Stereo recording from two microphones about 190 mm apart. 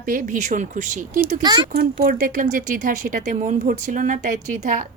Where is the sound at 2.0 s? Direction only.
45° right (ahead or behind).